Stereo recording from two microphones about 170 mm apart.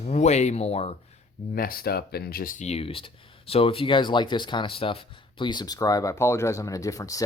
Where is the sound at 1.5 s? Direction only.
60° left (ahead or behind); by 7.2 s 20° left (ahead or behind).